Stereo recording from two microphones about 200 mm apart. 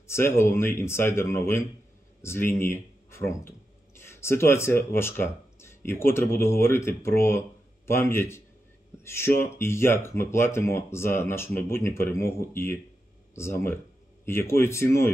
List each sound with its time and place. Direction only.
0.0 s speech: 15° left (ahead or behind)